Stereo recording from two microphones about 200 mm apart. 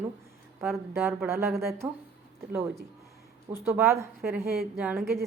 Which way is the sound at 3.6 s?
10° right (ahead or behind).